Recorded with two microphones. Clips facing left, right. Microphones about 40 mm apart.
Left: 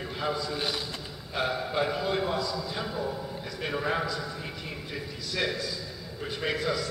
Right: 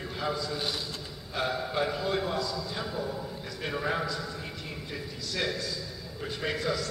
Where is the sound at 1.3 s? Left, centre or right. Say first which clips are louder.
Left 1 dB; centre.